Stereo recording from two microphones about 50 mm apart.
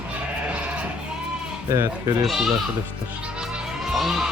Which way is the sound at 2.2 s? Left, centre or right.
Centre.